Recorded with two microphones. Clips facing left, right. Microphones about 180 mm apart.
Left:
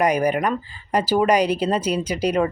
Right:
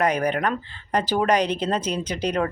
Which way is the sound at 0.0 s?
10° left (ahead or behind).